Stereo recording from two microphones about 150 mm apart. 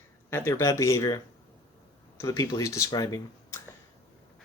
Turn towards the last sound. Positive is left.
turn(degrees=20)  # may be behind; listen again after turning